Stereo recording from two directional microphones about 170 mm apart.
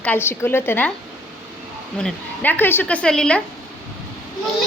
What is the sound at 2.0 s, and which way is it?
A woman's voice, 10° left (ahead or behind).